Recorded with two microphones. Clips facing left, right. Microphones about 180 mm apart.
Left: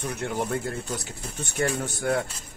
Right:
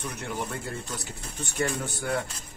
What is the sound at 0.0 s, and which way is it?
Speech, 50° left (ahead or behind).